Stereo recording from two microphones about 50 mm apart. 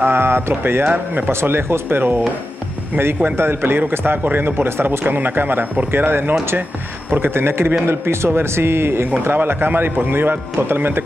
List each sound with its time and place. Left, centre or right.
0.0 s a man's voice: right
0.8 s speech: right
1.3 s a man's voice: right
3.3 s a man's voice: right